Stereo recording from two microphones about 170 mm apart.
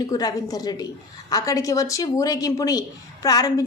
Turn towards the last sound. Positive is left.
turn(degrees=20)  # may be behind; listen again after turning